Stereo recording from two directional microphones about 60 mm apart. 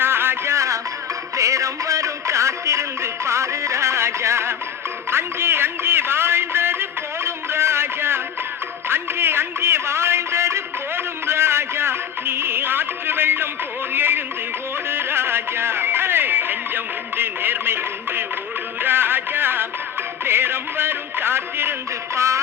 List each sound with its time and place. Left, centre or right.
0.0 s music: right